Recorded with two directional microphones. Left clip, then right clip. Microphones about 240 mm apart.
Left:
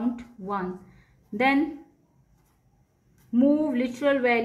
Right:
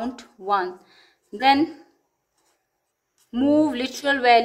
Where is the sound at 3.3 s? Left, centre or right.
Right.